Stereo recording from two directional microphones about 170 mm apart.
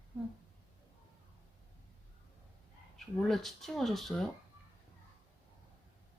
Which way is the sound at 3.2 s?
Centre (ahead or behind).